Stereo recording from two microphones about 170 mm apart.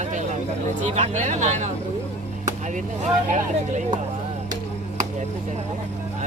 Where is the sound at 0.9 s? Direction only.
45° right (ahead or behind).